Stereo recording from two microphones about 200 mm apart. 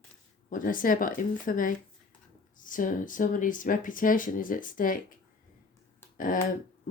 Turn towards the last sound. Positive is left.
turn(degrees=40)  # may be behind; listen again after turning